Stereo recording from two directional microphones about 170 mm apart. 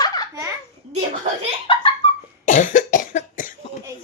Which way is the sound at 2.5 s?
50° left (ahead or behind).